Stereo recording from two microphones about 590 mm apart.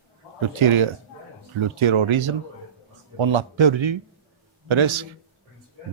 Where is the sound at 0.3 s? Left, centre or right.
Right.